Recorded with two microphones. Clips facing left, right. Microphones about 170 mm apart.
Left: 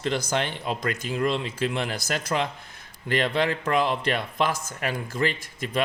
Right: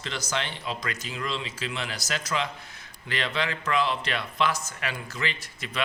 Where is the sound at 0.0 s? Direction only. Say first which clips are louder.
Left 6 dB; 50° left (ahead or behind).